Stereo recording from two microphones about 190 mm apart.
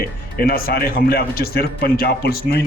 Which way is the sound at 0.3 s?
50° left (ahead or behind).